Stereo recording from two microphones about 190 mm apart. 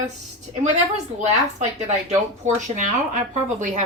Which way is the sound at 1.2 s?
35° right (ahead or behind).